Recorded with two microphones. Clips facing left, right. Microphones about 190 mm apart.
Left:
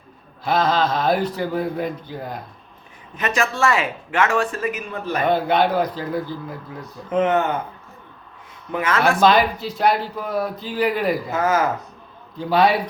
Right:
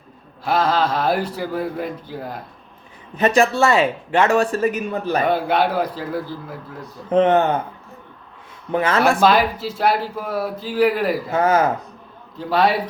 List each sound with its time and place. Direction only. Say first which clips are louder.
0.4 s a man's voice: even; 10° right (ahead or behind)
3.2 s speech: right 6 dB; 35° right (ahead or behind)
5.2 s a man's voice: left 3 dB; 10° right (ahead or behind)
7.1 s speech: right 4 dB; 35° right (ahead or behind)
8.7 s speech: right 3 dB; 35° right (ahead or behind)
9.2 s speech: even; 5° right (ahead or behind)
11.3 s speech: right 3 dB; 30° right (ahead or behind)
12.4 s speech: left 1 dB; 5° right (ahead or behind)